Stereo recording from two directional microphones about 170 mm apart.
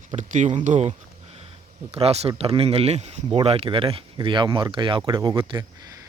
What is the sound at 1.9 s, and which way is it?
Speech, 35° right (ahead or behind).